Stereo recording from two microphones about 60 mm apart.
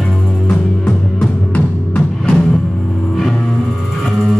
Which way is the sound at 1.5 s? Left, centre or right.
Left.